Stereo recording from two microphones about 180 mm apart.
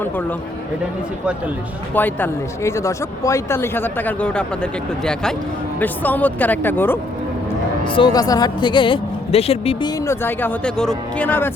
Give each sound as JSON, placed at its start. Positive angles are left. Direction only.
{"t": 0.0, "sound": "speech", "side_deg": 10}
{"t": 2.0, "sound": "speech", "side_deg": 10}
{"t": 7.9, "sound": "speech", "side_deg": 25}
{"t": 10.1, "sound": "speech", "side_deg": 10}